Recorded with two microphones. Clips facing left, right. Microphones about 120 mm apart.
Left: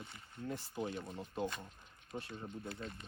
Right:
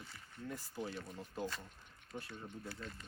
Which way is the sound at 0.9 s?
25° left (ahead or behind).